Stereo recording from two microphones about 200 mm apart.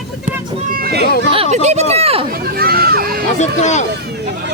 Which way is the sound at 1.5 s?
35° right (ahead or behind).